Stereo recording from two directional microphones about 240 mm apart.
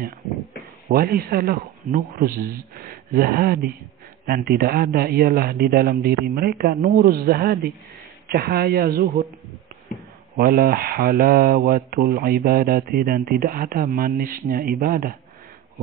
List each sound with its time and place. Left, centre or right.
0.8 s speech: right
10.3 s speech: right